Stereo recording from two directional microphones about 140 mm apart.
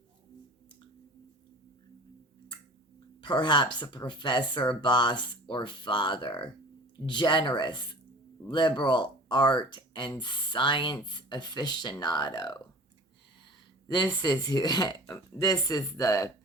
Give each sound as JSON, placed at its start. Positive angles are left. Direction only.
{"t": 3.2, "sound": "speech", "side_deg": 35}
{"t": 13.8, "sound": "speech", "side_deg": 30}